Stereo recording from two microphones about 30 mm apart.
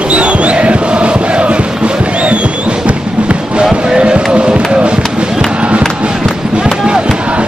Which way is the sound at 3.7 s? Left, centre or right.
Right.